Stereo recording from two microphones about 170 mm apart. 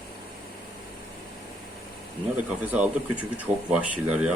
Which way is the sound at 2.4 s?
10° right (ahead or behind).